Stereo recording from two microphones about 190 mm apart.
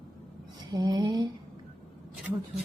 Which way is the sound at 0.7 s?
20° right (ahead or behind).